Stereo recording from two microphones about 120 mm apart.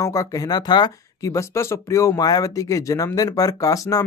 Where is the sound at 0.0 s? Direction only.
30° left (ahead or behind).